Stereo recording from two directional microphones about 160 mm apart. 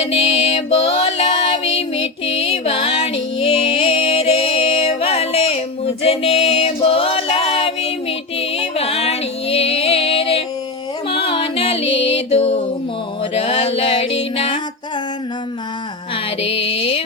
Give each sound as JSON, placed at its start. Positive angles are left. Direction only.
{"t": 0.0, "sound": "music", "side_deg": 40}
{"t": 16.4, "sound": "music", "side_deg": 35}